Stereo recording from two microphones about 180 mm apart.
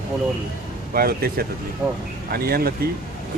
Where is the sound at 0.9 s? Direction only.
60° right (ahead or behind).